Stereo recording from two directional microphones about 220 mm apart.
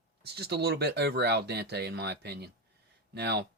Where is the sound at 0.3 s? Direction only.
50° right (ahead or behind).